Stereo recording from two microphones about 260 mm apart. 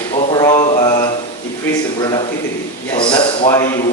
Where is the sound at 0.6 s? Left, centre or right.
Left.